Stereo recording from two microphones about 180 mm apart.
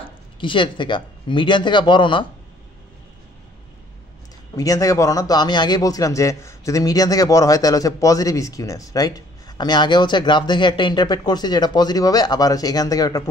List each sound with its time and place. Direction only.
0.0 s speech: 25° left (ahead or behind)
4.6 s a man's voice: 20° left (ahead or behind)